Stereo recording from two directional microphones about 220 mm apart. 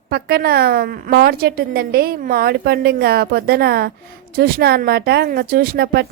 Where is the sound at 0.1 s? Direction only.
45° right (ahead or behind).